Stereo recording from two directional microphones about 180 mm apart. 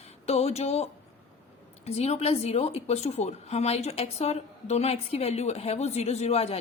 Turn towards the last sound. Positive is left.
turn(degrees=35)  # may be behind; listen again after turning